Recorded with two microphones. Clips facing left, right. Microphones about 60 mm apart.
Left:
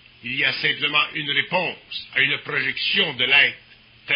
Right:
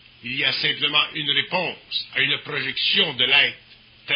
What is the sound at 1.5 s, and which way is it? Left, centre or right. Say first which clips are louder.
Speech: left 1 dB; centre.